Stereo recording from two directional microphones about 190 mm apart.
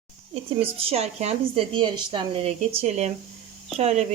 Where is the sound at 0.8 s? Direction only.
30° right (ahead or behind).